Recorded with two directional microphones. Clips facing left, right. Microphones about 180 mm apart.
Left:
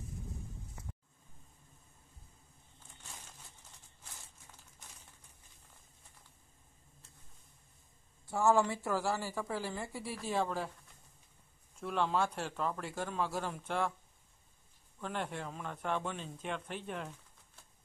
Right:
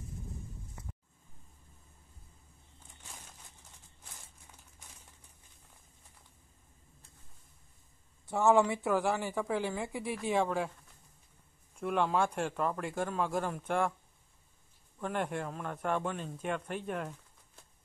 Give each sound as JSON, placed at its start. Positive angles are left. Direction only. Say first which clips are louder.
{"t": 8.3, "sound": "a woman's voice", "louder": "right 3 dB", "side_deg": -20}
{"t": 11.8, "sound": "a woman's voice", "louder": "right 3 dB", "side_deg": -5}
{"t": 15.0, "sound": "speech", "louder": "right 5 dB", "side_deg": -5}